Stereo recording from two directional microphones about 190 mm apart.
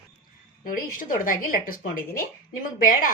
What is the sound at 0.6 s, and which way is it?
Speech, 45° left (ahead or behind).